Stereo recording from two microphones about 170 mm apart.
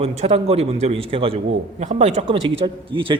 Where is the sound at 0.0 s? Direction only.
40° right (ahead or behind).